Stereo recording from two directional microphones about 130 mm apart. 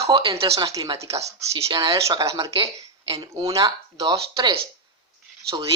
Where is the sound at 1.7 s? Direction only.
40° right (ahead or behind).